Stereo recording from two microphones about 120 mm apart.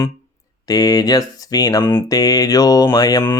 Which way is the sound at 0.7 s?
35° left (ahead or behind).